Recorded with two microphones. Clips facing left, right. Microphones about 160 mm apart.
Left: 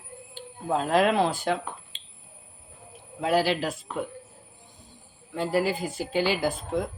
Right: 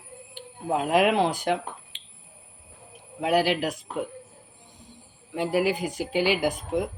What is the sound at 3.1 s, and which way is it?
Speech, 15° right (ahead or behind).